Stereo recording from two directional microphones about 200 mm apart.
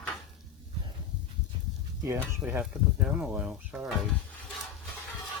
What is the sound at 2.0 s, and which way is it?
Speech, 10° right (ahead or behind).